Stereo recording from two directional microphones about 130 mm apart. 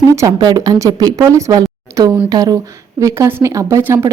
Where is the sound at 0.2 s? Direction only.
30° right (ahead or behind).